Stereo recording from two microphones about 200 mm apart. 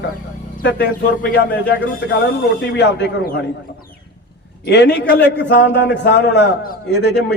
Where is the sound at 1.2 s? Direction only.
65° left (ahead or behind).